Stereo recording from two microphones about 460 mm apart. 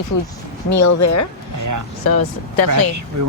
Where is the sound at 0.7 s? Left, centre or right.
Left.